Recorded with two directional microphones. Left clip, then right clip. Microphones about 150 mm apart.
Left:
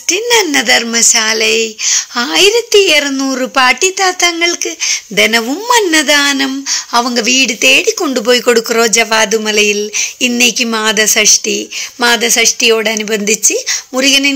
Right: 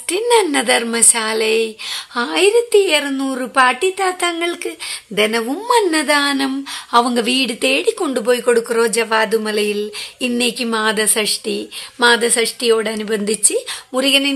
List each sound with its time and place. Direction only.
0.1 s speech: 10° left (ahead or behind)
2.3 s a woman's voice: 25° left (ahead or behind)
5.1 s speech: 25° left (ahead or behind)
8.3 s speech: 30° left (ahead or behind)